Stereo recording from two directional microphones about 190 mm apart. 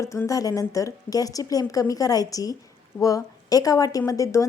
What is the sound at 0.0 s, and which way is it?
A woman's voice, 15° left (ahead or behind).